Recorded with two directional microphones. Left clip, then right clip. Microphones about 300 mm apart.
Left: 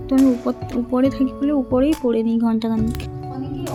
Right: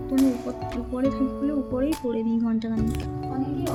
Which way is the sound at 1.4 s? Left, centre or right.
Centre.